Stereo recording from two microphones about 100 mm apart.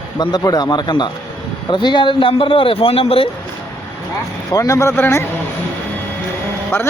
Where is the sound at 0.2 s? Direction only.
45° left (ahead or behind); by 3.2 s 70° left (ahead or behind).